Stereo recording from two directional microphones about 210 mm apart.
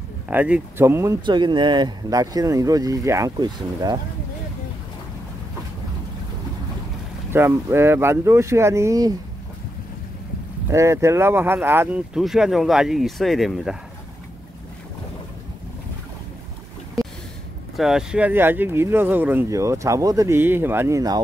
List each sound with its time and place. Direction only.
0.3 s speech: 10° right (ahead or behind)
7.3 s speech: 10° right (ahead or behind)
10.7 s speech: 15° right (ahead or behind)
17.7 s speech: centre (ahead or behind)